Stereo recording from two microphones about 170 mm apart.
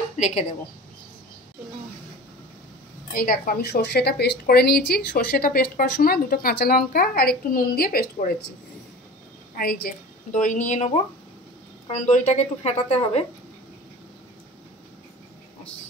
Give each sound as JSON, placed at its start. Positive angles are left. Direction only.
{"t": 0.2, "sound": "speech", "side_deg": 40}
{"t": 3.1, "sound": "speech", "side_deg": 55}
{"t": 9.6, "sound": "a woman's voice", "side_deg": 60}
{"t": 12.0, "sound": "speech", "side_deg": 40}